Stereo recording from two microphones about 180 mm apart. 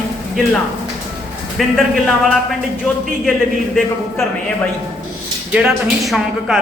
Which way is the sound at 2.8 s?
Centre (ahead or behind).